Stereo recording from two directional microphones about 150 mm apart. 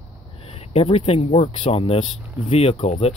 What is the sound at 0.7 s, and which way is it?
Speech, 40° left (ahead or behind).